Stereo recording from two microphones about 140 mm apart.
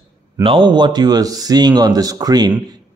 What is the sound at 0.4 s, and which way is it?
Speech, 40° right (ahead or behind).